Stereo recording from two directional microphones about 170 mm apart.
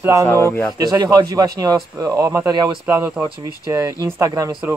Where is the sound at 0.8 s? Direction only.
25° right (ahead or behind).